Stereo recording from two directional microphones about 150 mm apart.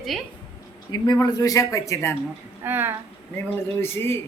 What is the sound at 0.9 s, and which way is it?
Speech, 30° left (ahead or behind).